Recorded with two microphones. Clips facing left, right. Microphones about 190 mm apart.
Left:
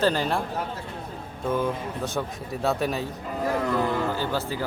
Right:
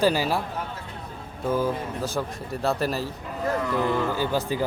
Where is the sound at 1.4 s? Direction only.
5° right (ahead or behind).